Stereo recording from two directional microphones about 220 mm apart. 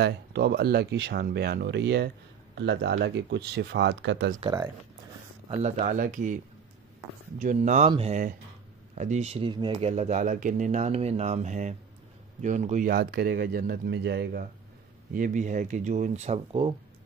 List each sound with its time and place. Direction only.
0.0 s speech: 50° right (ahead or behind)
4.4 s speech: 15° right (ahead or behind)
5.5 s speech: 30° right (ahead or behind)